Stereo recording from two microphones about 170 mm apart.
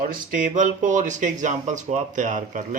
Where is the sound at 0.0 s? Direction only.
55° right (ahead or behind).